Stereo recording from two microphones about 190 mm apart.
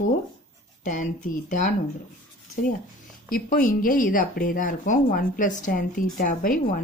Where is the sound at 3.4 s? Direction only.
45° left (ahead or behind).